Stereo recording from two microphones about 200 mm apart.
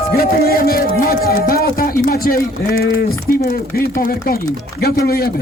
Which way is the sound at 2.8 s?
50° left (ahead or behind).